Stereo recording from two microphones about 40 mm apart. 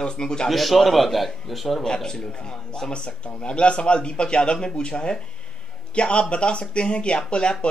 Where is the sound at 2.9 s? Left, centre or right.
Left.